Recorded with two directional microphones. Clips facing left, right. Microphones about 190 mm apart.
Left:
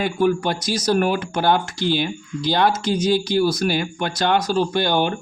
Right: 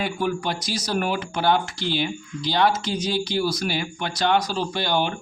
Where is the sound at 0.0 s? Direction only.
45° left (ahead or behind).